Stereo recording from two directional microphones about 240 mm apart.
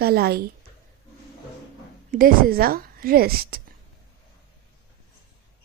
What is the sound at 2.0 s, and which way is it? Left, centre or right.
A woman's voice, right.